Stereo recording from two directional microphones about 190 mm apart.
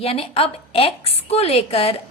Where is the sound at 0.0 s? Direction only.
30° left (ahead or behind).